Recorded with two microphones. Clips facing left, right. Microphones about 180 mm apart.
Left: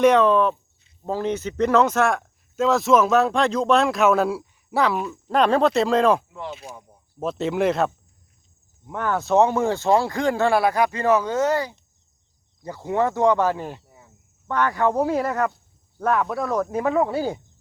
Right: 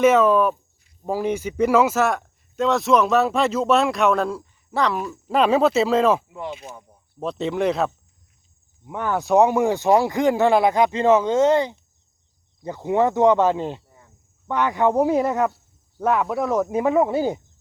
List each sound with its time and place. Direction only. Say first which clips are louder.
0.0 s speech: even; 5° right (ahead or behind)
5.0 s speech: right 1 dB; 5° right (ahead or behind)
6.7 s speech: even; 10° left (ahead or behind)
8.9 s speech: right 1 dB; 10° right (ahead or behind)
13.8 s cricket: left 2 dB; 5° left (ahead or behind)
14.4 s speech: right 1 dB; 15° right (ahead or behind)